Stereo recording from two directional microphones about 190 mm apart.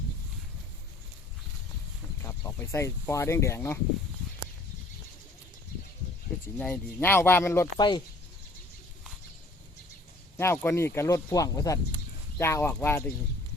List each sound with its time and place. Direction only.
2.2 s speech: 15° left (ahead or behind)
6.6 s speech: 10° left (ahead or behind)
7.8 s speech: 25° left (ahead or behind)
10.3 s speech: 10° left (ahead or behind)